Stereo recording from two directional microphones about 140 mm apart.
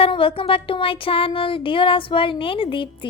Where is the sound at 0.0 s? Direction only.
40° left (ahead or behind).